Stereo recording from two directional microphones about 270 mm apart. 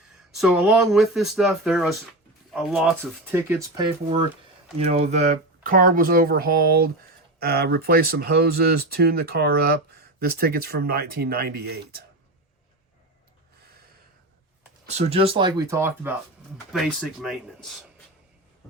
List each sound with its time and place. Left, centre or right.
0.3 s speech: centre
4.8 s speech: right
14.8 s speech: right; by 17.7 s centre